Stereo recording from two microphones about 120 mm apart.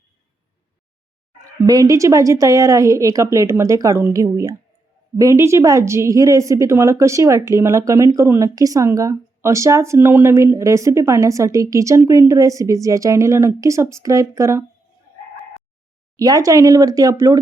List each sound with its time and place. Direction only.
1.6 s speech: 30° right (ahead or behind)
16.1 s speech: 30° right (ahead or behind)